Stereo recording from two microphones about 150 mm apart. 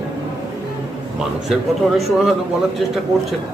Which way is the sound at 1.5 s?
Centre (ahead or behind).